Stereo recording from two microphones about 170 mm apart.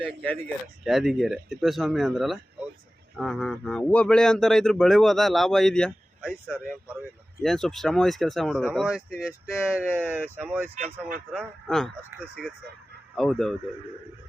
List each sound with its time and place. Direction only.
0.0 s speech: 10° left (ahead or behind)
0.9 s speech: centre (ahead or behind)
10.8 s speech: 40° right (ahead or behind)
11.3 s speech: centre (ahead or behind)
12.1 s speech: 15° right (ahead or behind)
13.1 s speech: centre (ahead or behind)